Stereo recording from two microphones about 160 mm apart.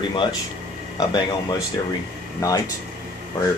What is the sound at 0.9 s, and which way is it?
Speech, 25° left (ahead or behind).